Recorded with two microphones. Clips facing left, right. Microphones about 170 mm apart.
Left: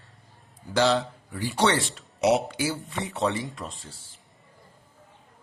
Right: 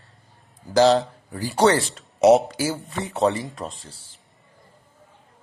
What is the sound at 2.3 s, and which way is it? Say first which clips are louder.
Speech: right 7 dB; 40° right (ahead or behind).